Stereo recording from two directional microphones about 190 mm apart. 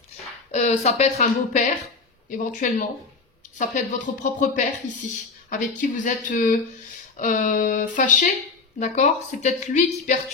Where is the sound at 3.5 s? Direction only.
40° left (ahead or behind).